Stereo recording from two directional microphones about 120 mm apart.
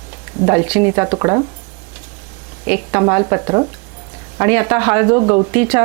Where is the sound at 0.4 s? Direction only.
20° right (ahead or behind).